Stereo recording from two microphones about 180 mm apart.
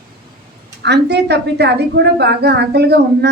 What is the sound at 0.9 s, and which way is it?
A woman's voice, 70° right (ahead or behind).